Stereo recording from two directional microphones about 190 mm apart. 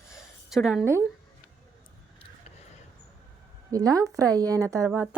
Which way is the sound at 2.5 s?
35° left (ahead or behind).